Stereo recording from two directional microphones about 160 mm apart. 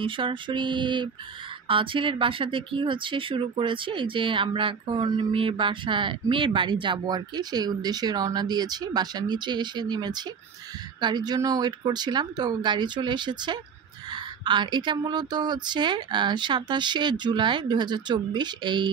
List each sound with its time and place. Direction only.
0.0 s a woman's voice: 30° right (ahead or behind)